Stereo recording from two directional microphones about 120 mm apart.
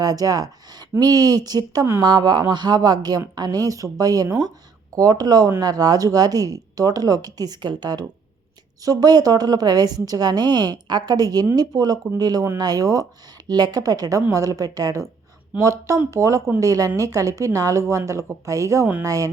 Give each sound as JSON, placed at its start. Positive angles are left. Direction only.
{"t": 0.0, "sound": "a woman's voice", "side_deg": -30}